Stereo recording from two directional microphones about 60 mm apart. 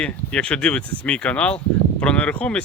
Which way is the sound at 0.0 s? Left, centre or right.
Centre.